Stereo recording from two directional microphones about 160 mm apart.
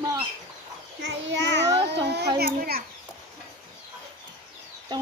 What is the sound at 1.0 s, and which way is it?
Speech, 90° right.